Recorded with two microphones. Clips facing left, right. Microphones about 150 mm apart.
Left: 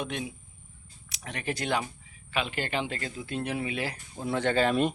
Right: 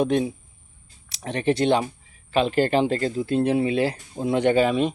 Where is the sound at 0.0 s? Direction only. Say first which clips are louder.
Right 13 dB; 35° right (ahead or behind); by 4.7 s 15° right (ahead or behind).